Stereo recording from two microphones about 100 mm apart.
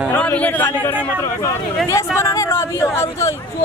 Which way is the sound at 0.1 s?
15° left (ahead or behind).